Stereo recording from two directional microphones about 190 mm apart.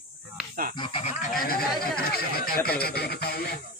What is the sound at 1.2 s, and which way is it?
Speech, 50° left (ahead or behind).